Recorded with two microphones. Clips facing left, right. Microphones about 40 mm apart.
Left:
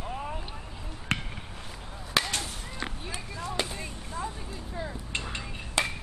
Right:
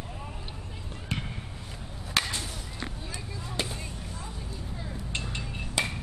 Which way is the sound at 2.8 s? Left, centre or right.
Left.